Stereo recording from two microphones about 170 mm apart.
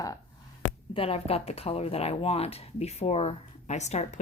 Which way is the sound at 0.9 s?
35° left (ahead or behind).